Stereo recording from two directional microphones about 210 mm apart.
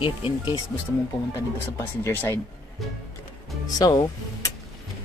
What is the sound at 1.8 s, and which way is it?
Speech, 15° left (ahead or behind).